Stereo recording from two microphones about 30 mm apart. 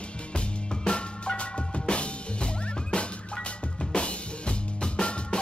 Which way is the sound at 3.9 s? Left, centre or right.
Left.